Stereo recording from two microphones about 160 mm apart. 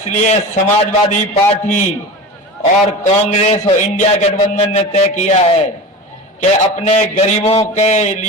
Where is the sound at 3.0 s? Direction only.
45° left (ahead or behind).